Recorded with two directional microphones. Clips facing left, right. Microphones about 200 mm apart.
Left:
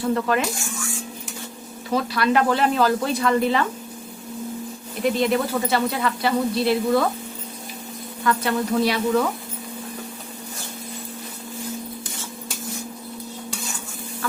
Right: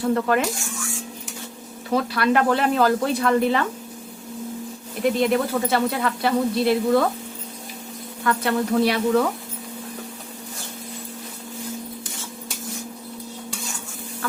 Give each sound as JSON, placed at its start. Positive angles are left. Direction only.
{"t": 0.0, "sound": "speech", "side_deg": -50}
{"t": 1.9, "sound": "speech", "side_deg": -55}
{"t": 5.0, "sound": "speech", "side_deg": -55}
{"t": 8.2, "sound": "speech", "side_deg": -55}